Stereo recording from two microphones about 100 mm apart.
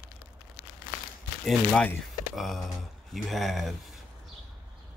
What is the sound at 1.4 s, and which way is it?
Speech, 10° left (ahead or behind).